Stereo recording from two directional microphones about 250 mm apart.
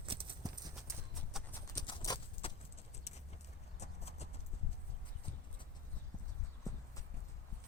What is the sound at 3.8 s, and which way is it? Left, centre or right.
Clip-clop, left.